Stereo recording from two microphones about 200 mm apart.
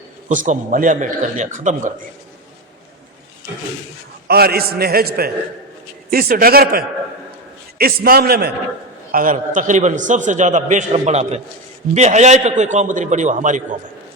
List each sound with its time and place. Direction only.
0.3 s a man's voice: 40° right (ahead or behind)
4.3 s a man's voice: 50° right (ahead or behind)
9.1 s a man's voice: 40° right (ahead or behind)